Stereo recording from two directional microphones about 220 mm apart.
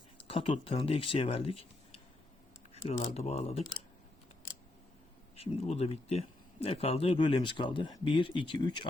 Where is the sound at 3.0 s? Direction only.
30° left (ahead or behind).